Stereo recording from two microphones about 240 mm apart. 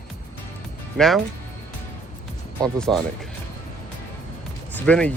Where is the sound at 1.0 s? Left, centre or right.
Centre.